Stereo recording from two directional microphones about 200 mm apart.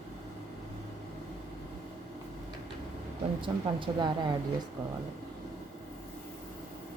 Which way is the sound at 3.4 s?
25° right (ahead or behind).